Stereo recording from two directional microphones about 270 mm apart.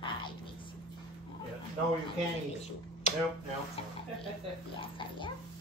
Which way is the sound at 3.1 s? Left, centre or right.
Left.